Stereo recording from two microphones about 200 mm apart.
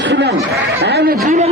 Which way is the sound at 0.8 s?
55° right (ahead or behind).